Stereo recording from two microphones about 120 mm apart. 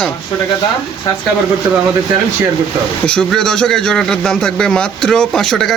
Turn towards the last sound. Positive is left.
turn(degrees=5)  # may be behind; listen again after turning